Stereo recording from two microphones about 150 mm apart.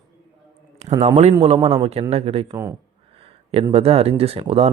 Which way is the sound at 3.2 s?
40° right (ahead or behind).